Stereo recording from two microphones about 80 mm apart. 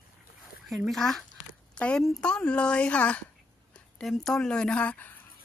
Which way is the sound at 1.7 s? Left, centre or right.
Centre.